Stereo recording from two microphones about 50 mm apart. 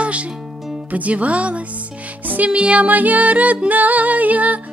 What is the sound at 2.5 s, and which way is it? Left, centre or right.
Music, right.